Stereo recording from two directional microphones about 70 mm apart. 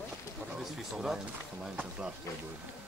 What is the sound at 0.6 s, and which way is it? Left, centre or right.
Speech, centre.